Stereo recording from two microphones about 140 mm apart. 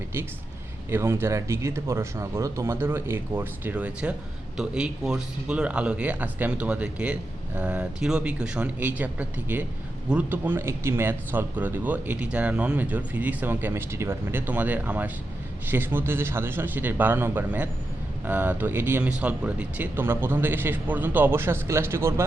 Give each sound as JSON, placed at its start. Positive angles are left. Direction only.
{"t": 0.9, "sound": "speech", "side_deg": -15}